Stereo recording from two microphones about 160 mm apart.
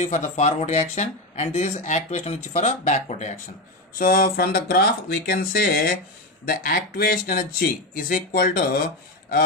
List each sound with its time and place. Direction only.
0.0 s speech: 45° left (ahead or behind)
4.0 s speech: 70° left (ahead or behind)